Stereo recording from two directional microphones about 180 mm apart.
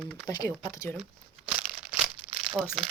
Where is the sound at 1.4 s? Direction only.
5° right (ahead or behind).